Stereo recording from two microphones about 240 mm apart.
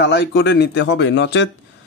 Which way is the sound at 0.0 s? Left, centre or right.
Left.